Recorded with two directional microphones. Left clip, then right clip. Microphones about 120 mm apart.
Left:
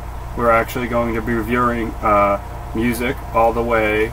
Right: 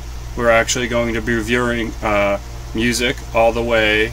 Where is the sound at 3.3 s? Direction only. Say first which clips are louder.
Even; 20° right (ahead or behind).